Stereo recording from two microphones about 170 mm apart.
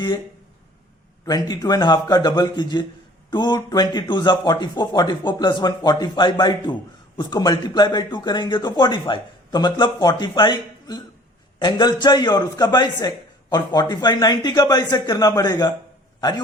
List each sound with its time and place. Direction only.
1.2 s a man's voice: 20° left (ahead or behind)